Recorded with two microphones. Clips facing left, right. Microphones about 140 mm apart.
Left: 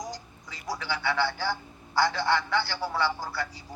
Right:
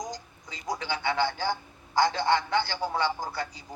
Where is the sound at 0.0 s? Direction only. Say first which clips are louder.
Right 1 dB; 20° right (ahead or behind).